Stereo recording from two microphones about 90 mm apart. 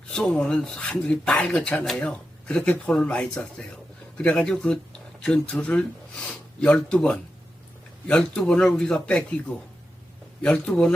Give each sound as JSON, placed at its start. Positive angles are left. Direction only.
{"t": 0.1, "sound": "speech", "side_deg": 10}